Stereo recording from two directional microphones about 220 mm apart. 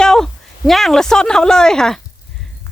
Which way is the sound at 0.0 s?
Centre (ahead or behind).